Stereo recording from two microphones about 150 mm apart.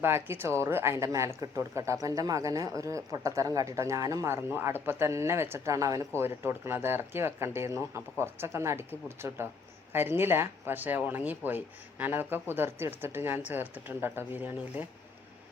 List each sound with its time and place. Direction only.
0.0 s speech: 15° right (ahead or behind)